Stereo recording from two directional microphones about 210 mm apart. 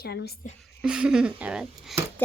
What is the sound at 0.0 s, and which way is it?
Speech, 50° left (ahead or behind).